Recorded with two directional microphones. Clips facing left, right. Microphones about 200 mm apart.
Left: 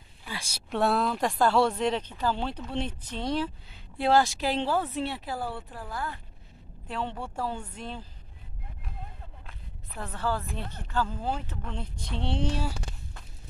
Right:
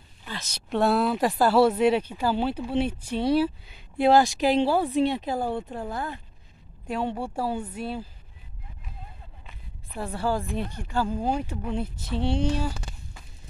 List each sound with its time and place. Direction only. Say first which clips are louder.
0.2 s speech: right 2 dB; 10° left (ahead or behind); by 8.1 s 10° right (ahead or behind)
9.5 s a sound: right 3 dB; 10° right (ahead or behind)
10.5 s speech: right 4 dB; 15° right (ahead or behind)